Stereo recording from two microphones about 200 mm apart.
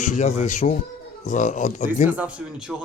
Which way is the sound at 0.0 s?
35° left (ahead or behind).